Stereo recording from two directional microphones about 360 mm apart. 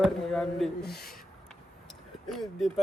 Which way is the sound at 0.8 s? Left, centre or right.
Left.